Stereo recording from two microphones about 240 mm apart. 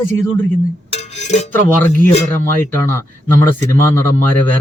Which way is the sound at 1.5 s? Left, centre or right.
Centre.